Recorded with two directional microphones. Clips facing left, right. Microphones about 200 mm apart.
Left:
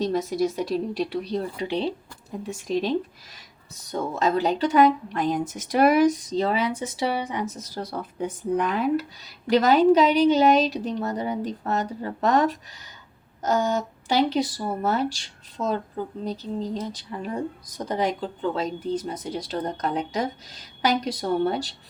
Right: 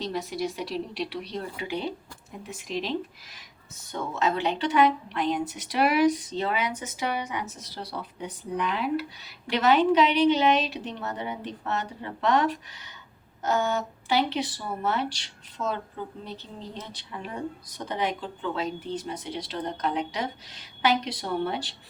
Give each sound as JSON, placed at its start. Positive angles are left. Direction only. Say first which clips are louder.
{"t": 0.0, "sound": "speech", "louder": "left 7 dB", "side_deg": 45}
{"t": 3.8, "sound": "speech", "louder": "left 3 dB", "side_deg": 40}